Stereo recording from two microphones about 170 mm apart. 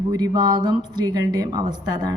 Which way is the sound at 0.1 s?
25° right (ahead or behind).